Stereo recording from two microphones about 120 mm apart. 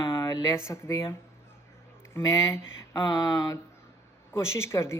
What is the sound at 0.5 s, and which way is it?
Speech, 20° left (ahead or behind).